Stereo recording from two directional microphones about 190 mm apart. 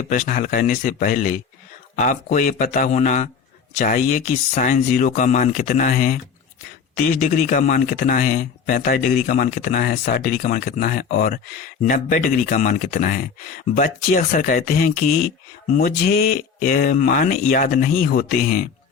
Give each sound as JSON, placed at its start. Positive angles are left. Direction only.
{"t": 0.1, "sound": "a man's voice", "side_deg": 45}